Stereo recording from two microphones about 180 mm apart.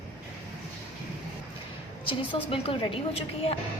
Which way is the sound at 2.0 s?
30° left (ahead or behind).